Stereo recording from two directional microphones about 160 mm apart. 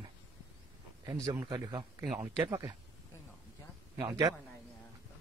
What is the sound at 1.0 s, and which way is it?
Speech, 20° right (ahead or behind).